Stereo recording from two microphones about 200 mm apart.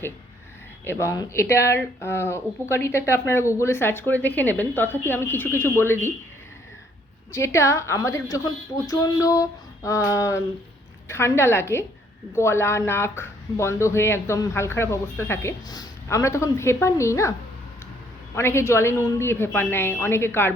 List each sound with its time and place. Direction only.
0.9 s speech: 15° left (ahead or behind)
7.3 s speech: 15° left (ahead or behind)
18.3 s speech: 15° left (ahead or behind)